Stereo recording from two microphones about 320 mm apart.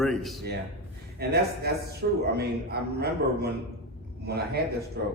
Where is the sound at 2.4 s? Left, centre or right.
Right.